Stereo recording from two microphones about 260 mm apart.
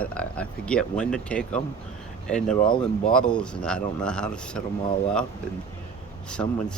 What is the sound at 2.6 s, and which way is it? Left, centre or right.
Speech, centre.